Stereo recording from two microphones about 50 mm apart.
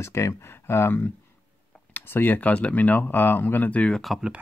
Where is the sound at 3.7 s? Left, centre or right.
Left.